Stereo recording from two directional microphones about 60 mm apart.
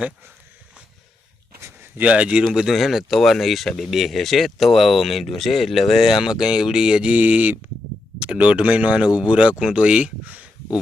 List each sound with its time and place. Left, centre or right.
2.0 s speech: right
2.7 s speech: centre
7.1 s speech: right